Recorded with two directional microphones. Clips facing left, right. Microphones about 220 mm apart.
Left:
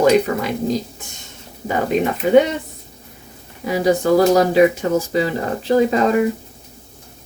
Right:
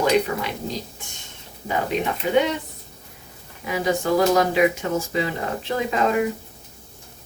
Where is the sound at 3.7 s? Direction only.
35° left (ahead or behind).